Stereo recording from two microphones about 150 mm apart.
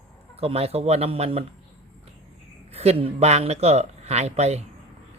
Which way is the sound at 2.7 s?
45° right (ahead or behind).